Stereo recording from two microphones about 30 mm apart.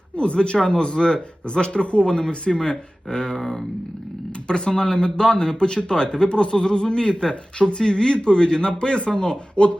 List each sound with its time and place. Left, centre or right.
0.2 s speech: left
2.0 s speech: left
3.3 s speech: centre
4.4 s speech: left